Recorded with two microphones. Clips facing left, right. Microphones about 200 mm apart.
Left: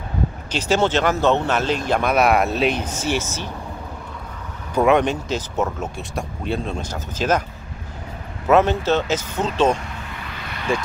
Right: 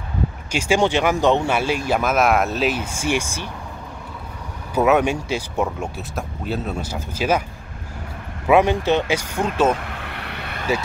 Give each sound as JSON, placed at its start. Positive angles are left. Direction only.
{"t": 0.5, "sound": "speech", "side_deg": -10}
{"t": 4.7, "sound": "speech", "side_deg": -5}
{"t": 8.5, "sound": "speech", "side_deg": -15}
{"t": 9.8, "sound": "vehicle", "side_deg": -60}